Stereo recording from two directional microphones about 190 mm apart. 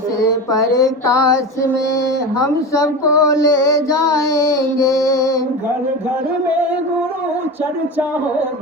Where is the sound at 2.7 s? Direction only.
15° left (ahead or behind).